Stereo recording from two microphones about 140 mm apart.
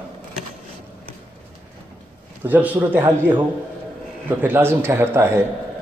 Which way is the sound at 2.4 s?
10° right (ahead or behind).